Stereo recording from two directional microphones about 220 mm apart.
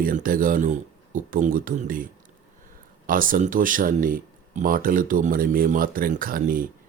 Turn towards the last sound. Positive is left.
turn(degrees=-40)  # may be behind; listen again after turning